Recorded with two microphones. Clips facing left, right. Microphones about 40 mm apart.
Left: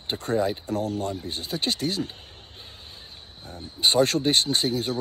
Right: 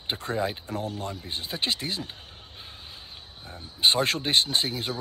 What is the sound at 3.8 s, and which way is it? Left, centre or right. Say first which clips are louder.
Speech: left 3 dB; right.